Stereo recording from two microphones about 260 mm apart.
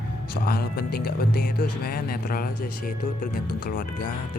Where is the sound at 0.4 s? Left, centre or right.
Left.